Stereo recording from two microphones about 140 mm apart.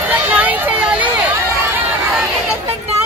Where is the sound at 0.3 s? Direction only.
10° right (ahead or behind).